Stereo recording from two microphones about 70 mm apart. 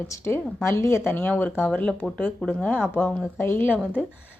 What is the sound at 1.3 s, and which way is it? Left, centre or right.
Speech, left.